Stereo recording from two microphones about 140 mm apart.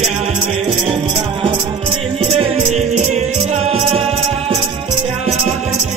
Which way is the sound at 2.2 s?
45° right (ahead or behind).